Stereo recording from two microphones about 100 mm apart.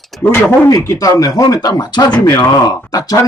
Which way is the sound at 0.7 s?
35° left (ahead or behind).